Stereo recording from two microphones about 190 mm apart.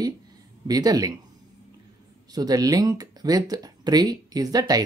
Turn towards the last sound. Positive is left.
turn(degrees=-20)  # may be behind; listen again after turning